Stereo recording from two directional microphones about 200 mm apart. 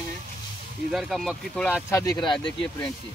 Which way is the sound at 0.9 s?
Centre (ahead or behind).